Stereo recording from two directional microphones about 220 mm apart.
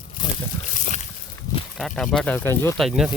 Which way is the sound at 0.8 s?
35° left (ahead or behind).